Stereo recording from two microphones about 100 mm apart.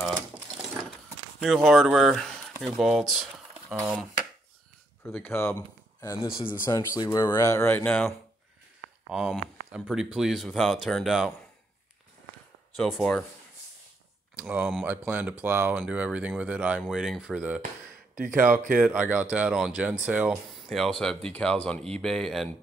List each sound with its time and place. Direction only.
1.0 s a sound: 5° right (ahead or behind)
2.6 s speech: centre (ahead or behind)
5.0 s speech: 25° left (ahead or behind)
9.1 s speech: 5° right (ahead or behind)
12.7 s speech: centre (ahead or behind)
14.3 s speech: 10° right (ahead or behind)
16.8 s speech: 5° right (ahead or behind)
20.4 s speech: centre (ahead or behind)